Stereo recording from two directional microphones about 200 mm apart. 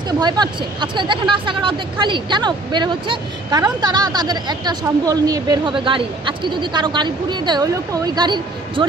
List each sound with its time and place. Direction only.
0.2 s speech: 20° right (ahead or behind)